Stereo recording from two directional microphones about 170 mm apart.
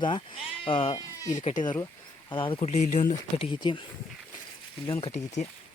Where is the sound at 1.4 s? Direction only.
45° left (ahead or behind).